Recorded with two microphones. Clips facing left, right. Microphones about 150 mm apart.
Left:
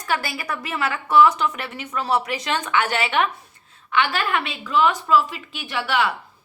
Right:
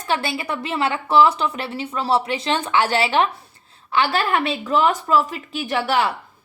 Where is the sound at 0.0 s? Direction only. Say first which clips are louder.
Right 2 dB; 25° right (ahead or behind).